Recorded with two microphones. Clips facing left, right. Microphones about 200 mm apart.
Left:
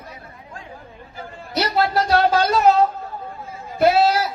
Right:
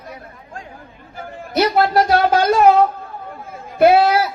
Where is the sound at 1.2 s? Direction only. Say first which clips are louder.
Right 6 dB; 50° right (ahead or behind).